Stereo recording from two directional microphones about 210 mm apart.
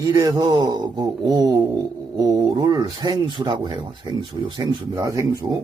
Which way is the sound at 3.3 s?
20° right (ahead or behind).